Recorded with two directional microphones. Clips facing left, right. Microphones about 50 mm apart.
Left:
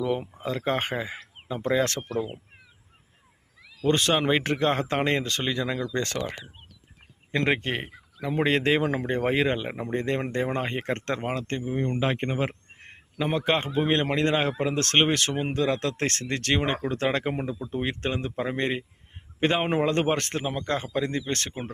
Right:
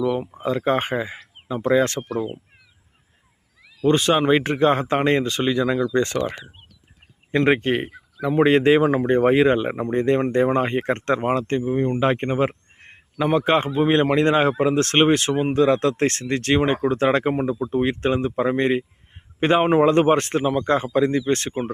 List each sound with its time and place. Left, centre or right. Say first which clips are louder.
0.0 s speech: right 5 dB; centre
0.4 s speech: right 6 dB; centre
3.8 s speech: right 5 dB; centre
7.3 s speech: right 7 dB; centre
8.8 s speech: right 8 dB; centre
15.5 s speech: right 9 dB; centre